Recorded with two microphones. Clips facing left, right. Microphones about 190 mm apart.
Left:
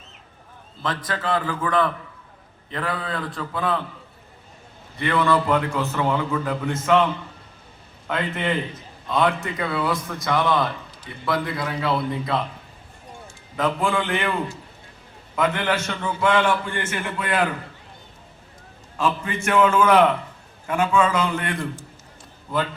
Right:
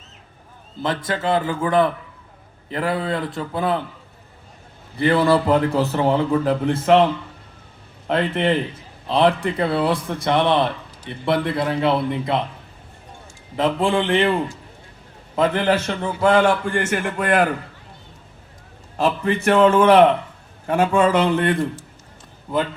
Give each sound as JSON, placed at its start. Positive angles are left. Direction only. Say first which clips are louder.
{"t": 0.8, "sound": "a man's voice", "louder": "right 4 dB", "side_deg": -25}
{"t": 4.9, "sound": "a man's voice", "louder": "right 4 dB", "side_deg": -35}
{"t": 13.6, "sound": "a man's voice", "louder": "right 4 dB", "side_deg": -30}
{"t": 15.4, "sound": "a man's voice", "louder": "right 4 dB", "side_deg": -35}
{"t": 18.9, "sound": "a man's voice", "louder": "right 4 dB", "side_deg": -40}